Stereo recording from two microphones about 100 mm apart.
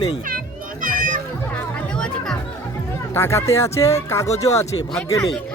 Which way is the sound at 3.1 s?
25° left (ahead or behind).